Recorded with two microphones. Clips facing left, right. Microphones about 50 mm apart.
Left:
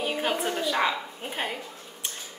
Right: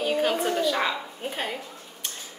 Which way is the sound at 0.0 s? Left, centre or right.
Centre.